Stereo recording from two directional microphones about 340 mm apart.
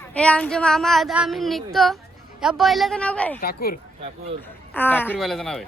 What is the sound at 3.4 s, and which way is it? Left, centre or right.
Speech, left.